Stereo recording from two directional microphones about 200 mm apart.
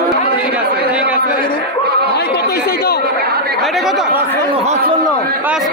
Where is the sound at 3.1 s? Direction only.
50° right (ahead or behind).